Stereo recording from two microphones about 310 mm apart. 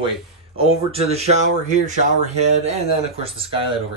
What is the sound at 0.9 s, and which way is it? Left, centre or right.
Speech, centre.